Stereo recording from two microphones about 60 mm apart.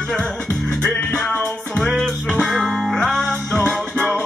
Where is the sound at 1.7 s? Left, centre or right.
Centre.